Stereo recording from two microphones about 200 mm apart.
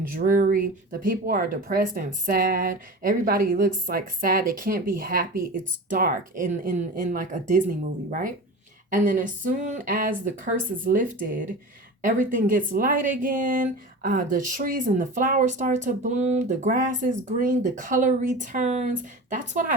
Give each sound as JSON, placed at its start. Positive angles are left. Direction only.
{"t": 0.2, "sound": "speech", "side_deg": -45}